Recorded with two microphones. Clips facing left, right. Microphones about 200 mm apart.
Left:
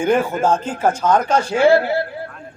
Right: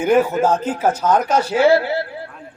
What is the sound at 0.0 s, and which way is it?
Speech, 5° right (ahead or behind).